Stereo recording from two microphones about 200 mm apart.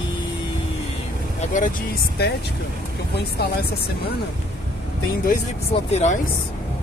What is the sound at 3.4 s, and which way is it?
Speech, 55° left (ahead or behind).